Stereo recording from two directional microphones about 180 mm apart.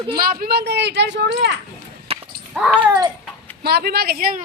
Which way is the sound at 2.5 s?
5° right (ahead or behind).